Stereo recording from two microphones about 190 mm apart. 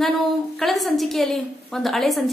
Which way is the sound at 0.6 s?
Centre (ahead or behind).